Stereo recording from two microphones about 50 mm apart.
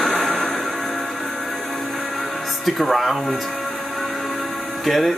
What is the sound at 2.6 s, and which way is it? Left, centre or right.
Speech, centre.